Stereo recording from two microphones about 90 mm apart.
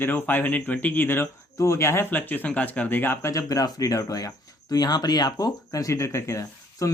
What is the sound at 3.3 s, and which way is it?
Speech, 40° left (ahead or behind).